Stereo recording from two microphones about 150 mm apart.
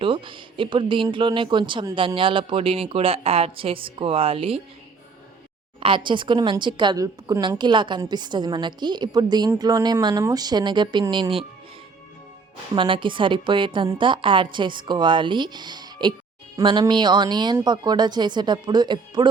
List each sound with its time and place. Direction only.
0.0 s speech: 35° right (ahead or behind)
6.1 s a woman's voice: 30° right (ahead or behind)
12.7 s a woman's voice: 35° right (ahead or behind)